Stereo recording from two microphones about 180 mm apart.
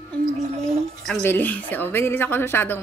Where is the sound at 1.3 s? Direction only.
10° left (ahead or behind).